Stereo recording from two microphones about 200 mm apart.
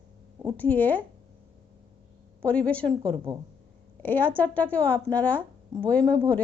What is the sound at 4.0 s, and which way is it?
Speech, 10° left (ahead or behind).